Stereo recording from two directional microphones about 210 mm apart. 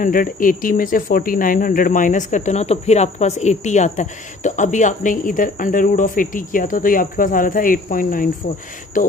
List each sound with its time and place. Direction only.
0.0 s speech: 40° left (ahead or behind)